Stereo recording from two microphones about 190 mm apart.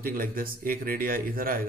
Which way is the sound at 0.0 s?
50° right (ahead or behind).